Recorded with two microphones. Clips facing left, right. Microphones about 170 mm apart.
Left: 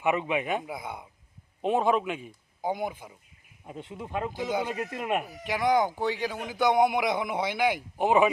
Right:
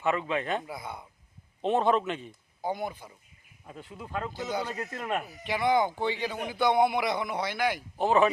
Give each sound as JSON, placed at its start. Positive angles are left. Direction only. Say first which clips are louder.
{"t": 0.0, "sound": "a man's voice", "louder": "left 2 dB", "side_deg": 15}
{"t": 1.6, "sound": "a man's voice", "louder": "even", "side_deg": 5}
{"t": 3.7, "sound": "a man's voice", "louder": "left 3 dB", "side_deg": 25}